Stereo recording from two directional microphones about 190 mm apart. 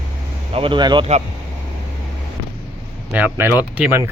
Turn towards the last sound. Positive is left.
turn(degrees=-10)  # may be behind; listen again after turning